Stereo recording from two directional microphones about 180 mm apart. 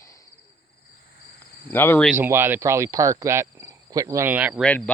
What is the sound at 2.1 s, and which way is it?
Speech, 10° right (ahead or behind).